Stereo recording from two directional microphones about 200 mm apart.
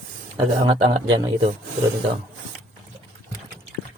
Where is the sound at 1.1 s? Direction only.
25° right (ahead or behind).